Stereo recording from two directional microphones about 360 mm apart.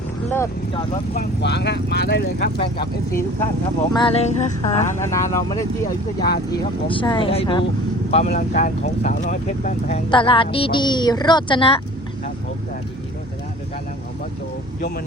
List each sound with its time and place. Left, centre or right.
0.3 s speech: centre
1.4 s speech: left
3.1 s speech: centre
14.8 s speech: left